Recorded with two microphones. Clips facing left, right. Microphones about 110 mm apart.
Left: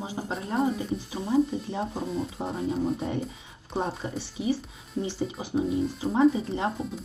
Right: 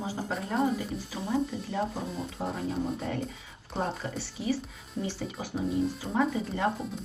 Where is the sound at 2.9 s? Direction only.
20° left (ahead or behind).